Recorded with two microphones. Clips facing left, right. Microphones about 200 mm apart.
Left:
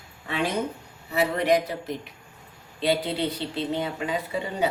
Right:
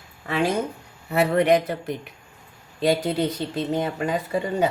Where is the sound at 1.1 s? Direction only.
60° right (ahead or behind).